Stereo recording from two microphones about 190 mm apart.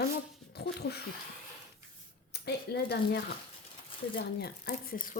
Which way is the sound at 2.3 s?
60° left (ahead or behind).